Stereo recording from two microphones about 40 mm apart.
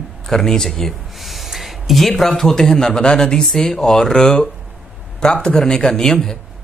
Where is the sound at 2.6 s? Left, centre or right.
Centre.